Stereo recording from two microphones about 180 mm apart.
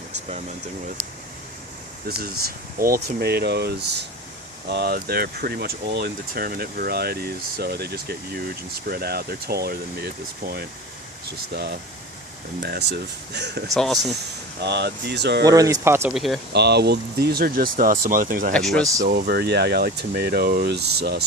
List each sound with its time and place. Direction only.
2.1 s speech: 55° right (ahead or behind)
13.7 s speech: centre (ahead or behind)
14.6 s speech: 70° right (ahead or behind)
15.4 s speech: 20° right (ahead or behind)
16.1 s speech: centre (ahead or behind)
16.5 s speech: 65° right (ahead or behind); by 18.5 s 50° right (ahead or behind)
18.5 s speech: 5° left (ahead or behind)
19.0 s speech: 50° right (ahead or behind)